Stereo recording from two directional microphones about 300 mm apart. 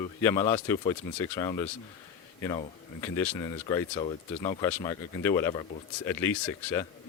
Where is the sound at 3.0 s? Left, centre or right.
Centre.